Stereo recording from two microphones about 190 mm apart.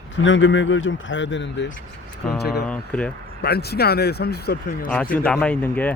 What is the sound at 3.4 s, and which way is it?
Speech, 55° left (ahead or behind).